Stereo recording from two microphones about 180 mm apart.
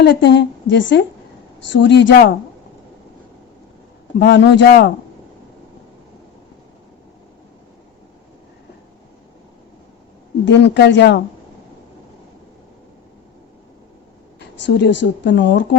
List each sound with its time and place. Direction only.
0.0 s a woman's voice: 70° left (ahead or behind)
4.2 s a woman's voice: 75° left (ahead or behind)
10.4 s a woman's voice: 75° left (ahead or behind)
14.3 s speech: 75° left (ahead or behind)